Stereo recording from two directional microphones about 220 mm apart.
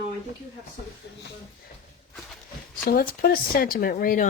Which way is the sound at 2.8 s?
40° left (ahead or behind).